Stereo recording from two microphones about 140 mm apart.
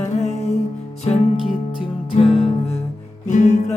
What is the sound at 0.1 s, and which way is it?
Music, 50° left (ahead or behind).